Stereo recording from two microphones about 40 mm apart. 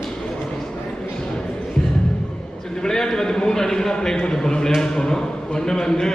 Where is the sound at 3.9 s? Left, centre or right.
Left.